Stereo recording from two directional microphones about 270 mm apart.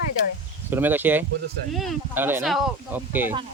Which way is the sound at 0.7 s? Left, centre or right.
Centre.